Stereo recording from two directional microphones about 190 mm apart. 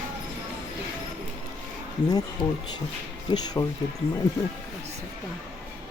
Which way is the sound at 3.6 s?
20° left (ahead or behind).